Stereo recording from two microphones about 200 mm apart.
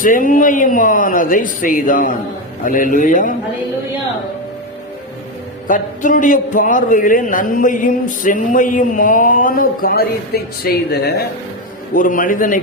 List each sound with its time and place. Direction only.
0.0 s a man's voice: 40° left (ahead or behind)
5.6 s a man's voice: 40° left (ahead or behind)